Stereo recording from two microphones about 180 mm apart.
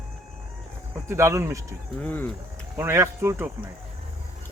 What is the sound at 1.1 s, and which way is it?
Speech, 15° right (ahead or behind).